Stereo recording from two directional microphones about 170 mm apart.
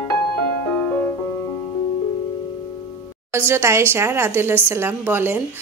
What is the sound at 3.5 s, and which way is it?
A woman's voice, 15° right (ahead or behind).